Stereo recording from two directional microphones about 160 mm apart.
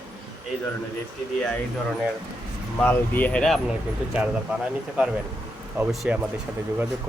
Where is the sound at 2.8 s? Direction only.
10° left (ahead or behind).